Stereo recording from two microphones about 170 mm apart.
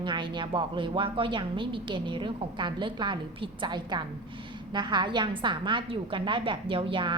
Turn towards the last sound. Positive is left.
turn(degrees=-30)  # may be behind; listen again after turning